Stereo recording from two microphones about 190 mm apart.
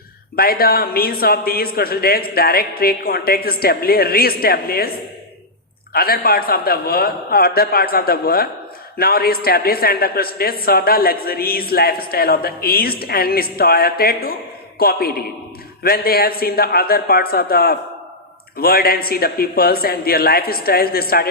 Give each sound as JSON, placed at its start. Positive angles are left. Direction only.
{"t": 0.3, "sound": "a man's voice", "side_deg": 50}
{"t": 5.9, "sound": "a man's voice", "side_deg": 55}